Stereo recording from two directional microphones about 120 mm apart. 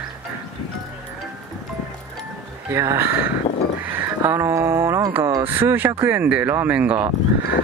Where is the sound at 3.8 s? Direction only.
15° right (ahead or behind).